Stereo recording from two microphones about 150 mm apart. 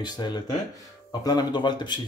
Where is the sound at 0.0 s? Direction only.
30° left (ahead or behind).